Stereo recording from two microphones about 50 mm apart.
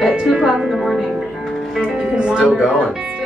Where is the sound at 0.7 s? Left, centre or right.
Centre.